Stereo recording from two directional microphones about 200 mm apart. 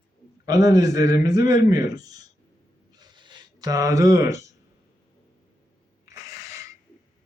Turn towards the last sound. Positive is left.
turn(degrees=-15)  # may be behind; listen again after turning